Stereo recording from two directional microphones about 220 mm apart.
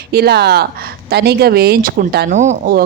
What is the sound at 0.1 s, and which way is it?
Speech, 45° right (ahead or behind).